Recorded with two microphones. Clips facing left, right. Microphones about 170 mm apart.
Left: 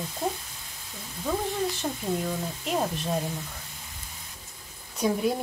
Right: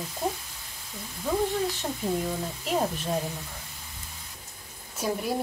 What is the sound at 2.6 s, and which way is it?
Speech, centre (ahead or behind).